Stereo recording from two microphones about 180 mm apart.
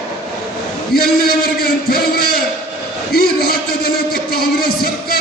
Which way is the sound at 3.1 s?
60° left (ahead or behind).